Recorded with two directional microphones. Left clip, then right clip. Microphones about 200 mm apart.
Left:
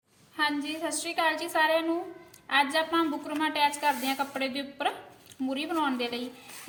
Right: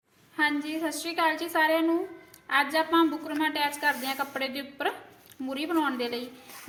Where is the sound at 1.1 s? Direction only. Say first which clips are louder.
Right 1 dB; 20° right (ahead or behind).